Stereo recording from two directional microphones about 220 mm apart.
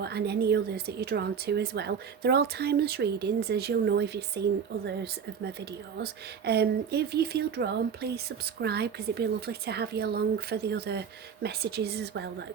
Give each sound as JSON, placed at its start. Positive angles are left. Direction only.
{"t": 0.0, "sound": "a woman's voice", "side_deg": -50}
{"t": 6.0, "sound": "a woman's voice", "side_deg": -50}